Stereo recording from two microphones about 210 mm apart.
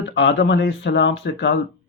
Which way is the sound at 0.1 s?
60° left (ahead or behind).